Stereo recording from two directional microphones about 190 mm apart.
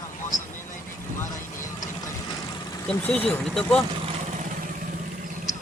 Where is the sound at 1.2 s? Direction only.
15° left (ahead or behind).